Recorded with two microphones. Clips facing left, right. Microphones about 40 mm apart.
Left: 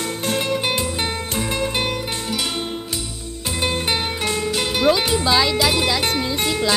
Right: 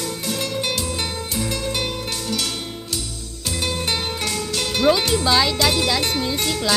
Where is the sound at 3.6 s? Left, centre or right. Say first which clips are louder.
Left 3 dB; left.